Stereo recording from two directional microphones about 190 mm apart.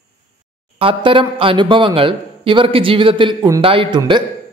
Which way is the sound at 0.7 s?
30° right (ahead or behind).